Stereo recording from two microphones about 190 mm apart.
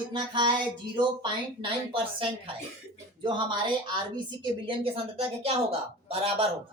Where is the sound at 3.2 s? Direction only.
25° right (ahead or behind).